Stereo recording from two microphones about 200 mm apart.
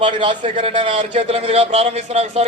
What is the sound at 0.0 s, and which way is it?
A man's voice, 25° right (ahead or behind).